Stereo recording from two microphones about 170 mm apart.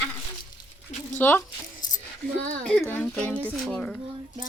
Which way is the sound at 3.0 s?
5° left (ahead or behind).